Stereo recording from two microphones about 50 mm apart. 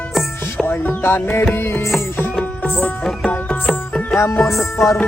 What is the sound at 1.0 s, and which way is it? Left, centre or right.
Music, left.